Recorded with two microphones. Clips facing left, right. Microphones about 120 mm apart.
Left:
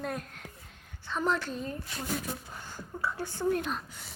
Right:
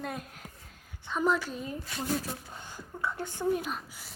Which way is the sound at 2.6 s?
20° right (ahead or behind).